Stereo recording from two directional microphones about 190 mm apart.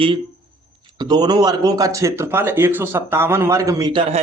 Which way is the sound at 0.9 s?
20° right (ahead or behind).